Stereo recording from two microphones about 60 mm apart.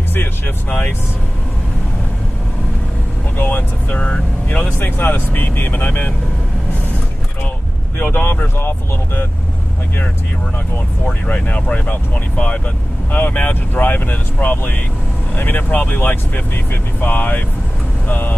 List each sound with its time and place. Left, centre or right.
0.1 s speech: left
3.3 s speech: left
8.0 s speech: left
11.2 s speech: left